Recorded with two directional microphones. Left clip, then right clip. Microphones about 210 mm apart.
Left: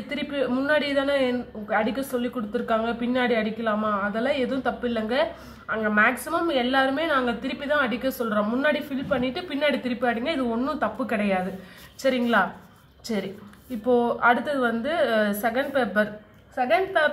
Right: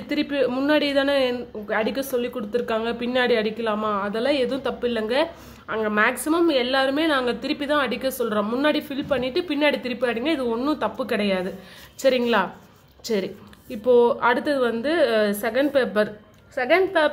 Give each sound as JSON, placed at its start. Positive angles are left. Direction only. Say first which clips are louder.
{"t": 0.1, "sound": "a man's voice", "louder": "right 4 dB", "side_deg": -50}